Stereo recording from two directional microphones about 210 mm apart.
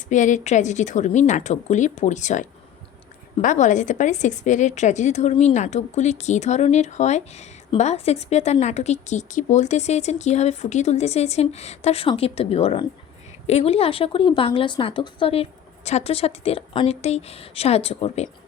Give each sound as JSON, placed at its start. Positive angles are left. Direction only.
{"t": 0.1, "sound": "a woman's voice", "side_deg": 35}